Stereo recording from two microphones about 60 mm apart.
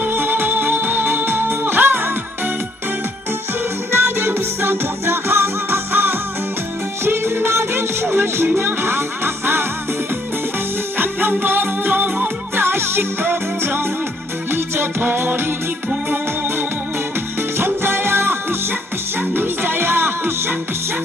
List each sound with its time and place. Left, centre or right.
0.0 s music: right
3.9 s music: right
10.9 s music: right
12.6 s music: right
17.6 s music: right